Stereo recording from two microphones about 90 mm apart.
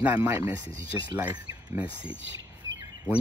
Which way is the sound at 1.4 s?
40° right (ahead or behind).